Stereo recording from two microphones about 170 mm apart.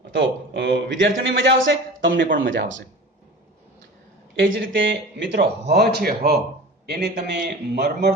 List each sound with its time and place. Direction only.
0.1 s a man's voice: 90° right
2.2 s speech: 55° right (ahead or behind)
4.4 s speech: 90° right; by 6.4 s 65° right (ahead or behind)
6.8 s speech: 75° right (ahead or behind)